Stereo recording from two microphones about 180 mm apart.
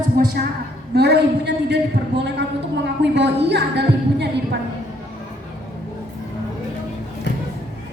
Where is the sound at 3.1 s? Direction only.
70° right (ahead or behind).